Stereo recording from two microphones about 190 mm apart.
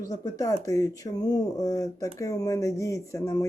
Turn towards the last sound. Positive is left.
turn(degrees=15)  # may be behind; listen again after turning